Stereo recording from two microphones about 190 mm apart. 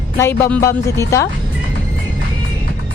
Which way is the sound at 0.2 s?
15° left (ahead or behind).